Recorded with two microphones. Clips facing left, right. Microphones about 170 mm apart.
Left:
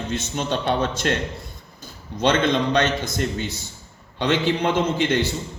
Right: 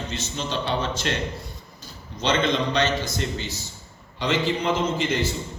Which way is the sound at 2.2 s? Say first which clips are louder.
Left 3 dB; 55° left (ahead or behind).